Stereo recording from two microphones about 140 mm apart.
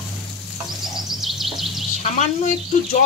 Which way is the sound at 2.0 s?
55° left (ahead or behind).